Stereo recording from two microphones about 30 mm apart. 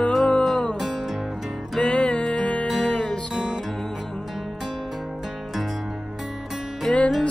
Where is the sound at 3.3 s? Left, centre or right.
Centre.